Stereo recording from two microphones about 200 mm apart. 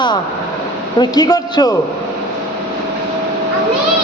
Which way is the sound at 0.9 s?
20° left (ahead or behind).